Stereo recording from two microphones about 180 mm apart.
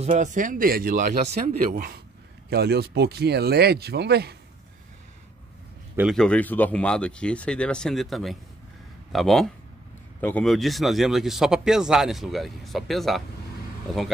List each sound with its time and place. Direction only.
0.0 s speech: 45° right (ahead or behind)
2.5 s speech: 65° right (ahead or behind)
5.9 s speech: centre (ahead or behind)